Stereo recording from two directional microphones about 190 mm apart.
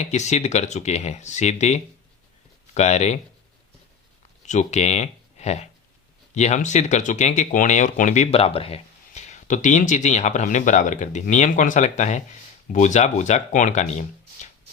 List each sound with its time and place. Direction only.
0.0 s speech: 35° left (ahead or behind)
4.4 s speech: 35° left (ahead or behind)